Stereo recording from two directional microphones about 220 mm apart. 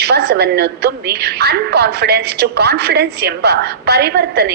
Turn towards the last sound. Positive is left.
turn(degrees=-45)  # may be behind; listen again after turning